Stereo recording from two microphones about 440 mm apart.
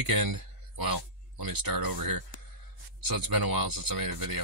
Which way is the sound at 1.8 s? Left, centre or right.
Right.